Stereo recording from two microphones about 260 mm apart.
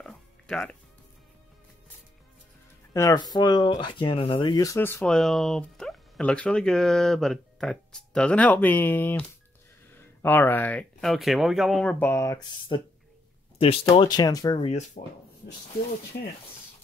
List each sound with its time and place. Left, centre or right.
0.0 s music: centre
2.9 s speech: centre